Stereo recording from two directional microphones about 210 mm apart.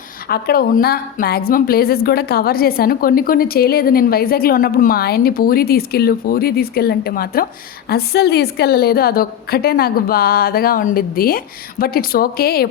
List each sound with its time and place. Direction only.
0.3 s a woman's voice: 45° left (ahead or behind)